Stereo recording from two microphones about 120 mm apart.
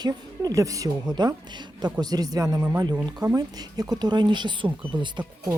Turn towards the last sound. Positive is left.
turn(degrees=-40)  # may be behind; listen again after turning